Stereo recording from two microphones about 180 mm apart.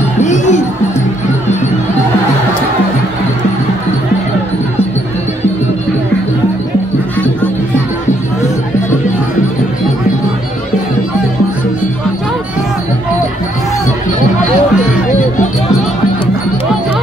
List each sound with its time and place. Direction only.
0.2 s music: 40° left (ahead or behind)